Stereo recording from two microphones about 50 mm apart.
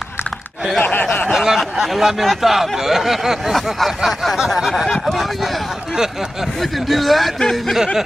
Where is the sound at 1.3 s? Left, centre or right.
Centre.